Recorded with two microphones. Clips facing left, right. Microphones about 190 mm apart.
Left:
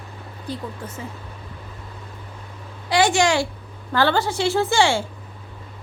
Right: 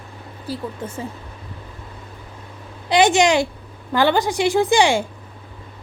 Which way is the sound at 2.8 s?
20° right (ahead or behind).